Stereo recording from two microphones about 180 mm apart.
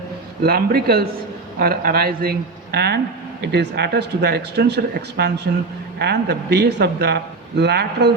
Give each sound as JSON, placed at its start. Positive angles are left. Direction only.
{"t": 0.4, "sound": "a man's voice", "side_deg": -60}